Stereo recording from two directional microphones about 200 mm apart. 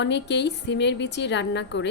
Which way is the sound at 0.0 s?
60° left (ahead or behind).